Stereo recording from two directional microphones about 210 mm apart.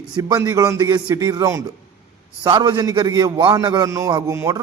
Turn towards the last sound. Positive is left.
turn(degrees=-15)  # may be behind; listen again after turning